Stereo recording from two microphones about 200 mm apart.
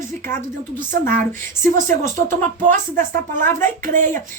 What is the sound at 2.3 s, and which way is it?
Speech, 40° right (ahead or behind).